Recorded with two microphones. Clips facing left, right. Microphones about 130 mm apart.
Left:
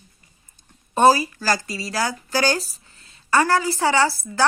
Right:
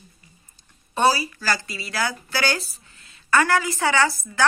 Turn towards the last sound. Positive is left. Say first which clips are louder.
# left 1 dB
turn(degrees=35)  # may be behind; listen again after turning